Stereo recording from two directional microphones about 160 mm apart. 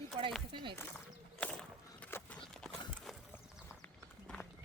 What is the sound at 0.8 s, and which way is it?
Walk, 10° left (ahead or behind).